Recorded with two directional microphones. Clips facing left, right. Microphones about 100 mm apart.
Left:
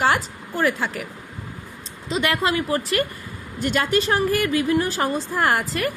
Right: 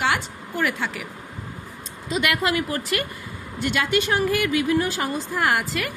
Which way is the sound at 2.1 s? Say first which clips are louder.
Left 1 dB; 30° left (ahead or behind).